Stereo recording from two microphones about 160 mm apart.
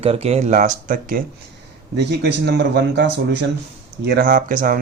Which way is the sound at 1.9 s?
90° right.